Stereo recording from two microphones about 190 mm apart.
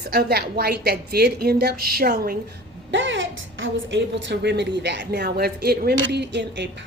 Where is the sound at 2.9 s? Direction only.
80° right.